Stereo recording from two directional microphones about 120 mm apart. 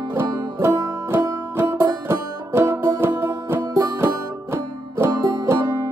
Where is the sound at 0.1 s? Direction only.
25° right (ahead or behind).